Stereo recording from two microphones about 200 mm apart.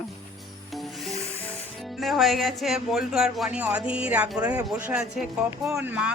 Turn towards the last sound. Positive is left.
turn(degrees=-10)  # may be behind; listen again after turning